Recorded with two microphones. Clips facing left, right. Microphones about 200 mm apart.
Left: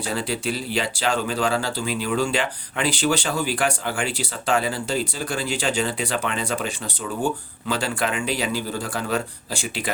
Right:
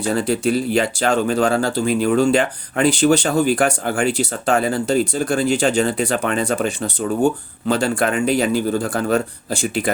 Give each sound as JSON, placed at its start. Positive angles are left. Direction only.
{"t": 0.0, "sound": "speech", "side_deg": -45}